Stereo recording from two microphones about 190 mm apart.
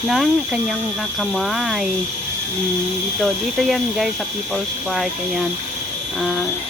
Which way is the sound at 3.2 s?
Centre (ahead or behind).